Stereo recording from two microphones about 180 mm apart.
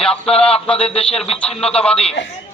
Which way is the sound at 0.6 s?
5° left (ahead or behind).